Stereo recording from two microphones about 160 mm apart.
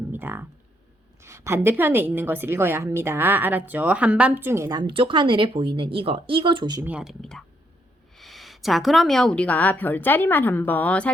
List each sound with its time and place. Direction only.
0.1 s a sound: 15° right (ahead or behind)
1.2 s a woman's voice: 15° right (ahead or behind)
4.8 s speech: 30° right (ahead or behind)
6.8 s a woman's voice: 5° right (ahead or behind)